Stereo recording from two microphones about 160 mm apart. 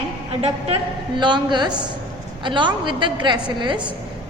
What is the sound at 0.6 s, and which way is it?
A woman's voice, 30° right (ahead or behind).